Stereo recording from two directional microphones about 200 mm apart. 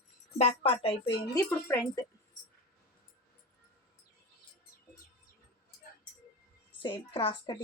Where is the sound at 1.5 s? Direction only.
15° left (ahead or behind).